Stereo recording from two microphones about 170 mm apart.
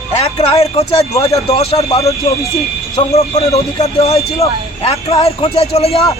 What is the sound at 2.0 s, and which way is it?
Speech, 20° left (ahead or behind).